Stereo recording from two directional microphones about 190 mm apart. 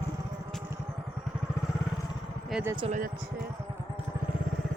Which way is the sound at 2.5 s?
10° right (ahead or behind).